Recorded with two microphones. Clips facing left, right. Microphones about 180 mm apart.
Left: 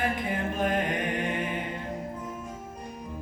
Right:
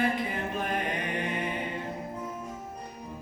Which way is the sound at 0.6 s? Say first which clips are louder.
Left 7 dB; 50° left (ahead or behind).